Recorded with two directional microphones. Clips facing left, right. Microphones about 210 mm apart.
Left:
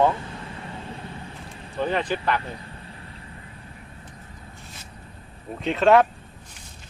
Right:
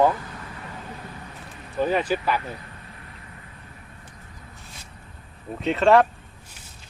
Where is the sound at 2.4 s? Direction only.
30° left (ahead or behind).